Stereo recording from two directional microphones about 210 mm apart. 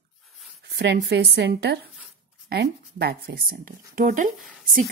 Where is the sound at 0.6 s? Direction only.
50° right (ahead or behind).